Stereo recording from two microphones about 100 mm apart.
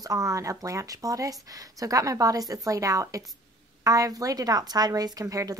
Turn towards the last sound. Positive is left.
turn(degrees=-35)  # may be behind; listen again after turning